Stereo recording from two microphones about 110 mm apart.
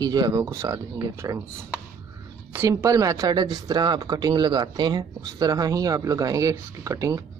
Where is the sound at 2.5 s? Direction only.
20° right (ahead or behind).